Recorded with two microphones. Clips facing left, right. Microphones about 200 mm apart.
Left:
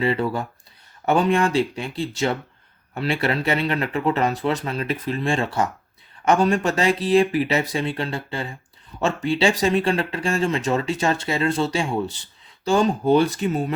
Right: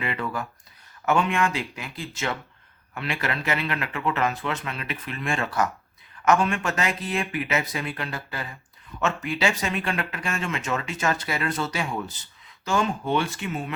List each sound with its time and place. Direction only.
0.0 s speech: 35° left (ahead or behind)